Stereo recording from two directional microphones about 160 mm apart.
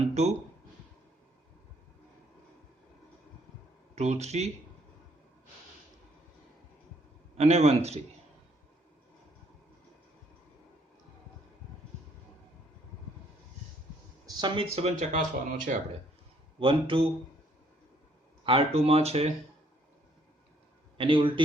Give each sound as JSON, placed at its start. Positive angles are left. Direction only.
{"t": 0.0, "sound": "speech", "side_deg": -45}
{"t": 3.9, "sound": "speech", "side_deg": -45}
{"t": 7.3, "sound": "speech", "side_deg": -40}
{"t": 14.3, "sound": "speech", "side_deg": -25}
{"t": 16.6, "sound": "speech", "side_deg": -35}
{"t": 18.4, "sound": "speech", "side_deg": -35}
{"t": 21.0, "sound": "speech", "side_deg": -30}